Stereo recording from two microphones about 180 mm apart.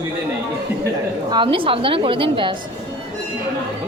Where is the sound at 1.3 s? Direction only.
30° right (ahead or behind).